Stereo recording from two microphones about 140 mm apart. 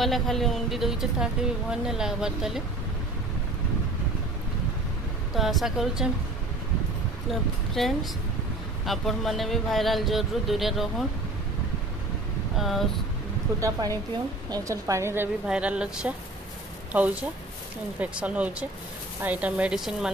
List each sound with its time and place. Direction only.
0.0 s speech: centre (ahead or behind)
5.3 s speech: centre (ahead or behind)
7.2 s speech: centre (ahead or behind)
12.5 s speech: centre (ahead or behind)
13.6 s a woman's voice: 25° right (ahead or behind)
15.4 s a woman's voice: 5° right (ahead or behind)